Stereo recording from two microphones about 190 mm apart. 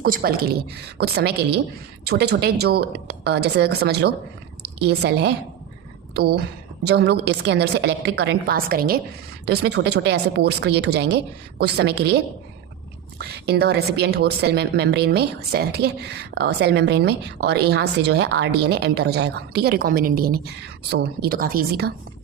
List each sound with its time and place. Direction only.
0.0 s a woman's voice: 50° right (ahead or behind)